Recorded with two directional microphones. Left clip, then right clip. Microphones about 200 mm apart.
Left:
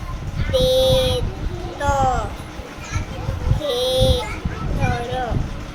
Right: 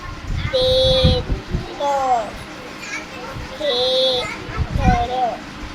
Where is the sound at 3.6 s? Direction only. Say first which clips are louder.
Right 2 dB; 25° left (ahead or behind).